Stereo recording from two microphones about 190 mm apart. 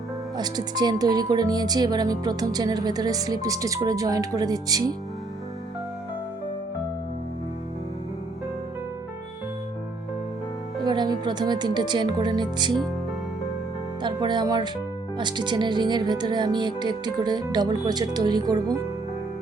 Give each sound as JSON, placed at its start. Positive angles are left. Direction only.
{"t": 0.3, "sound": "speech", "side_deg": -20}
{"t": 10.8, "sound": "speech", "side_deg": -25}
{"t": 14.0, "sound": "speech", "side_deg": -25}